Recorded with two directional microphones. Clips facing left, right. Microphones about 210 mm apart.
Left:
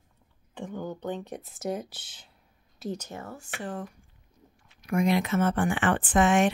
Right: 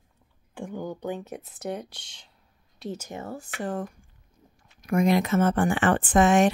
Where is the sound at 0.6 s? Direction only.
10° right (ahead or behind).